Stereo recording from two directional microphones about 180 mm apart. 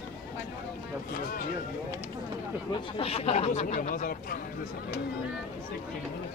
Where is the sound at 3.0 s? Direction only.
35° left (ahead or behind); by 4.3 s 50° left (ahead or behind).